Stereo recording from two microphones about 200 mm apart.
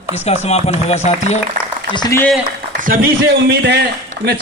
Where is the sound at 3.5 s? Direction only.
60° right (ahead or behind).